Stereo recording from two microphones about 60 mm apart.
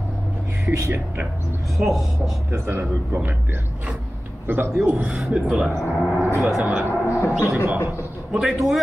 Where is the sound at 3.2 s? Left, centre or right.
Right.